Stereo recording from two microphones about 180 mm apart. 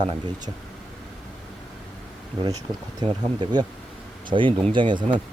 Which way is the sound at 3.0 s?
25° right (ahead or behind).